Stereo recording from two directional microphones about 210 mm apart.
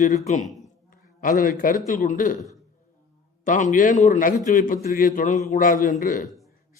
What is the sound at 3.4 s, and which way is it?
A man's voice, 35° left (ahead or behind).